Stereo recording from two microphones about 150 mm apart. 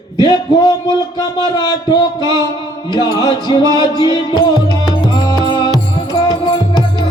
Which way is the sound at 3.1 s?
25° left (ahead or behind).